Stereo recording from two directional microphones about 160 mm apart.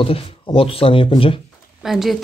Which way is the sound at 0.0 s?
35° left (ahead or behind).